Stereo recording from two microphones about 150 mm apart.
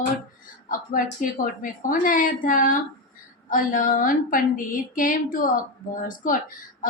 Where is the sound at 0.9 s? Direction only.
65° left (ahead or behind).